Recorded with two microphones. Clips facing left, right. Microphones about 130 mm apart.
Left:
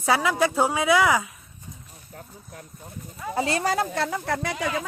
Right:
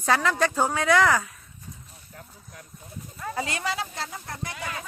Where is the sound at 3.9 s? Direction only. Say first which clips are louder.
Left 10 dB; 75° left (ahead or behind).